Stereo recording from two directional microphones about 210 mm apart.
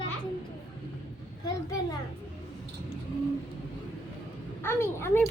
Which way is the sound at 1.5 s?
20° left (ahead or behind).